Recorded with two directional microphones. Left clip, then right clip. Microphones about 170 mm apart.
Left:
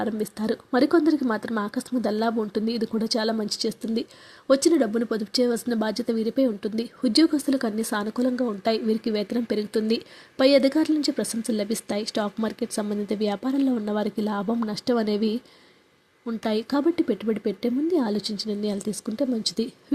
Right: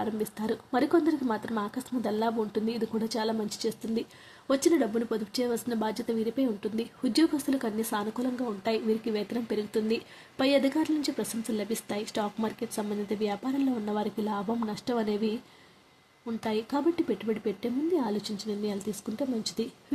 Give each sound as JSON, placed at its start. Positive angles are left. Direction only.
{"t": 0.0, "sound": "a woman's voice", "side_deg": 30}